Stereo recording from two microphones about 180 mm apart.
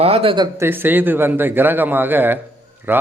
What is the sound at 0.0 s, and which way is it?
Speech, 30° right (ahead or behind).